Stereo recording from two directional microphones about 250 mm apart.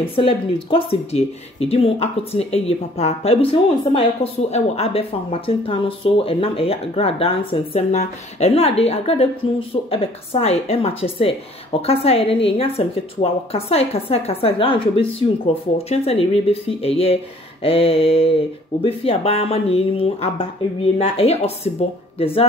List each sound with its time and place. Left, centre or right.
0.0 s speech: left